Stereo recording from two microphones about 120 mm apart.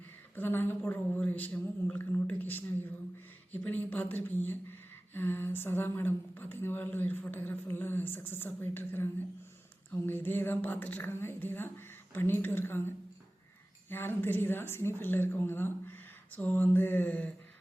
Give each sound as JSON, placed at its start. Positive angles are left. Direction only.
{"t": 0.3, "sound": "speech", "side_deg": 20}
{"t": 13.9, "sound": "speech", "side_deg": 20}